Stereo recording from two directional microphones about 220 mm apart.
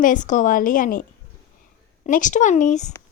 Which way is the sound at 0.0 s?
35° left (ahead or behind).